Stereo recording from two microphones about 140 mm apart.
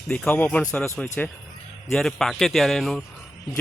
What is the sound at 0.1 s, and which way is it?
Speech, 10° left (ahead or behind).